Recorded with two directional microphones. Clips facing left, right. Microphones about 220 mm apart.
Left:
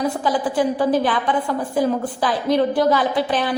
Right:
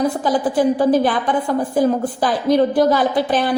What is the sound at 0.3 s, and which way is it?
A woman's voice, 40° right (ahead or behind).